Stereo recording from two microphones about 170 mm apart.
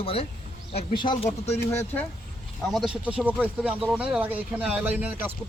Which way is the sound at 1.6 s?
15° left (ahead or behind).